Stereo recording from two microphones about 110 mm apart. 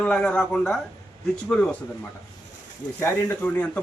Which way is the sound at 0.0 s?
10° left (ahead or behind).